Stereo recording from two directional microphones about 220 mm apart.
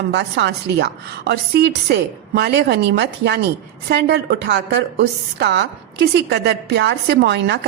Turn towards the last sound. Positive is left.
turn(degrees=-50)  # may be behind; listen again after turning